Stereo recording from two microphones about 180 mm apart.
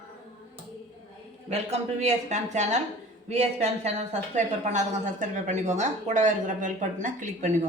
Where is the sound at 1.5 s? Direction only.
40° right (ahead or behind).